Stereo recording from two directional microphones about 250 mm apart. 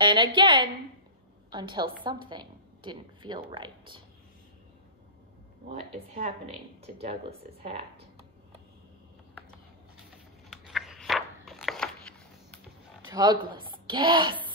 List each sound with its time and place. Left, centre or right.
0.0 s a woman's voice: centre
5.7 s speech: right
10.5 s a sound: centre
13.1 s a woman's voice: centre